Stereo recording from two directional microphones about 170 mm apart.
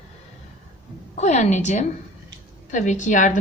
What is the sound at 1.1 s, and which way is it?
A woman's voice, 45° left (ahead or behind).